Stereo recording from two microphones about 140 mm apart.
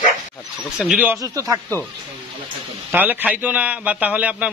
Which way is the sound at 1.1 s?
25° right (ahead or behind).